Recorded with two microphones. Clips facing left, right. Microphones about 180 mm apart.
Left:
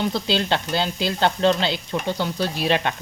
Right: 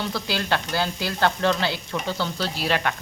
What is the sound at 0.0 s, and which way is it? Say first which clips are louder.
Speech: left 5 dB; 20° left (ahead or behind).